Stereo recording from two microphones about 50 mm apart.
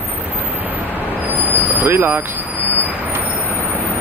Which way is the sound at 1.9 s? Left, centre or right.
Right.